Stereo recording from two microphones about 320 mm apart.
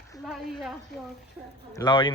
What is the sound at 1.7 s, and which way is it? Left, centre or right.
Speech, centre.